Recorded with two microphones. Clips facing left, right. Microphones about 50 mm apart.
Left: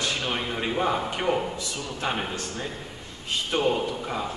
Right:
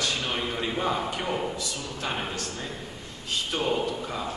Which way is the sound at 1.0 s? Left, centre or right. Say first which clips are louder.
Left 3 dB; left.